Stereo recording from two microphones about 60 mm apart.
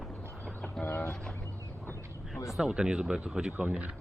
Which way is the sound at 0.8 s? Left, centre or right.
Left.